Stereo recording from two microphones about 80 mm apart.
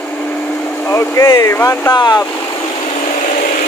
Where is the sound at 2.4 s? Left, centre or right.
Left.